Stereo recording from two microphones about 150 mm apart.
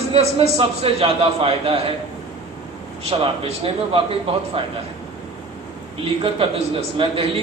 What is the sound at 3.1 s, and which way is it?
A woman's voice, 40° right (ahead or behind).